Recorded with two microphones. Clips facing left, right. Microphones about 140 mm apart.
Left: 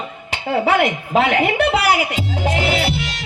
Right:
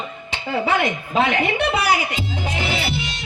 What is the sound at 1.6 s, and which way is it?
A woman's voice, 75° left (ahead or behind).